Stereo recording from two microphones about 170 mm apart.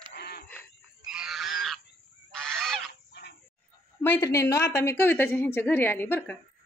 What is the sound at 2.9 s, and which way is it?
Chicken, 80° left.